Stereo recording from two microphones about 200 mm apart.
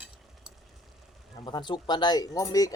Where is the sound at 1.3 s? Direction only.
20° left (ahead or behind).